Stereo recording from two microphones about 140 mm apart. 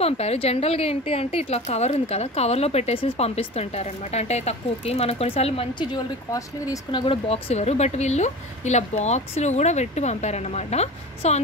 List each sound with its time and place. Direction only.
0.0 s a woman's voice: 45° left (ahead or behind)
6.7 s speech: 35° left (ahead or behind)
7.2 s a woman's voice: 45° left (ahead or behind)